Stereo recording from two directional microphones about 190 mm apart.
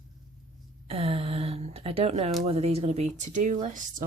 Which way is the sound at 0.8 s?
30° right (ahead or behind).